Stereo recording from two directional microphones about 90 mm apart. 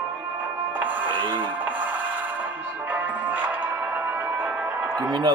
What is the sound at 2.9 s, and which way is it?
Music, 20° right (ahead or behind).